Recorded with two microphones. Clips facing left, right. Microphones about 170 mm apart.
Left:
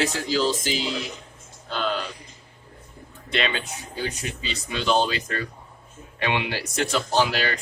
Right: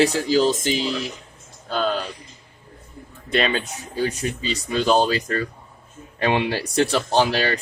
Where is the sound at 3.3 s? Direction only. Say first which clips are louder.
Right 5 dB; 40° right (ahead or behind).